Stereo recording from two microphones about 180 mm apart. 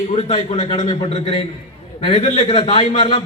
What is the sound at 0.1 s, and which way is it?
A man's voice, 35° left (ahead or behind).